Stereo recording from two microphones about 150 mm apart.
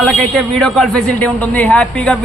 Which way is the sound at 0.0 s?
Centre (ahead or behind).